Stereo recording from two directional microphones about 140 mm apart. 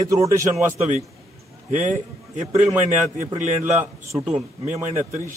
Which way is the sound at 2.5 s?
20° right (ahead or behind).